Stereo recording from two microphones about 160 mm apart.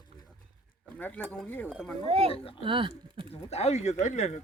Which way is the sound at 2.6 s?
30° right (ahead or behind).